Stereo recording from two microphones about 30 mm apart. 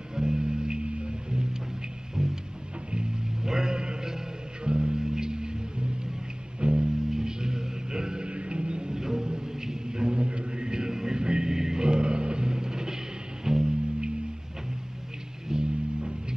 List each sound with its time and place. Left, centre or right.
0.1 s music: right
3.4 s a sound: centre
4.6 s music: right
7.1 s music: right
8.3 s music: right
8.9 s a sound: right
10.2 s music: right; by 13.7 s centre
15.4 s music: right